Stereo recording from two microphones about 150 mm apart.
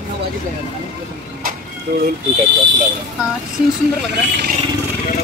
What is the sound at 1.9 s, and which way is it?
Speech, 80° right.